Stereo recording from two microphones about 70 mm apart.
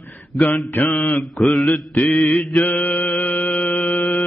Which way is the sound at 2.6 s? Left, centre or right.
Left.